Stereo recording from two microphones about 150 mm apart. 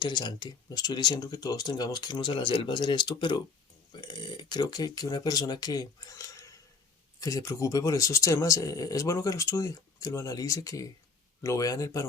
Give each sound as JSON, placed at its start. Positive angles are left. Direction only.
{"t": 0.0, "sound": "speech", "side_deg": 30}